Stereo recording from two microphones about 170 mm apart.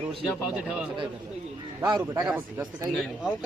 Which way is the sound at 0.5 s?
5° right (ahead or behind).